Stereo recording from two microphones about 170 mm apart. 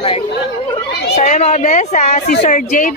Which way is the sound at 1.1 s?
45° left (ahead or behind).